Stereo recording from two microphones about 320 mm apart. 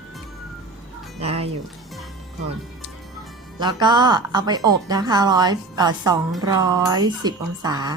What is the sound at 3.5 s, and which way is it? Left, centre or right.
A woman's voice, centre.